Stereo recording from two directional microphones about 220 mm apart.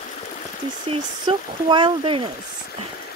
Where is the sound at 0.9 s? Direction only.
20° right (ahead or behind).